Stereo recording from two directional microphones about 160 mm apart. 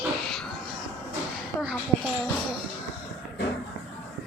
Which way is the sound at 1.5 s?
15° left (ahead or behind).